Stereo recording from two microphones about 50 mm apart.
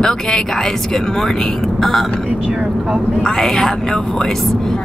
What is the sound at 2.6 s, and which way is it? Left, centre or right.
Speech, right.